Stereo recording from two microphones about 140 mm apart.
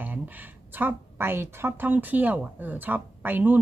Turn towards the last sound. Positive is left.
turn(degrees=-15)  # may be behind; listen again after turning